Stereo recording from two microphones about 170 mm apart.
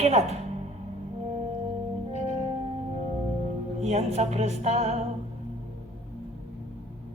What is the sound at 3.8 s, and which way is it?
A woman's voice, 40° right (ahead or behind).